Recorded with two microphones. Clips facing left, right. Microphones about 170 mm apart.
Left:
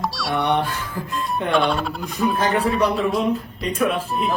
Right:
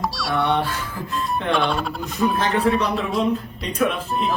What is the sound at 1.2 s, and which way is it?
Speech, centre (ahead or behind).